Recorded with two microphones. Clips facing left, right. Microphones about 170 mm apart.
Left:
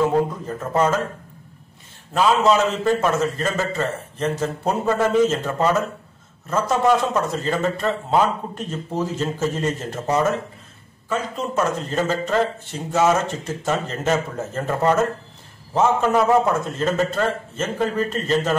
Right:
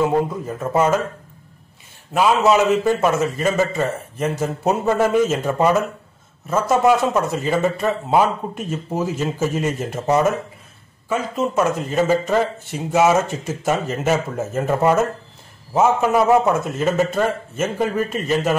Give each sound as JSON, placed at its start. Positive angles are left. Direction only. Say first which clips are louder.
{"t": 0.0, "sound": "a man's voice", "louder": "right 1 dB", "side_deg": -10}
{"t": 2.1, "sound": "a man's voice", "louder": "right 2 dB", "side_deg": -10}
{"t": 11.1, "sound": "a man's voice", "louder": "right 4 dB", "side_deg": -10}